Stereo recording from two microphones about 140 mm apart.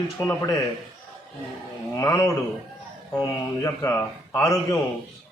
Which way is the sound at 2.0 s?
25° left (ahead or behind).